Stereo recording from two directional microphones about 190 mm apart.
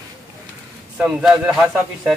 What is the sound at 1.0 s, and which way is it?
A man's voice, 5° right (ahead or behind).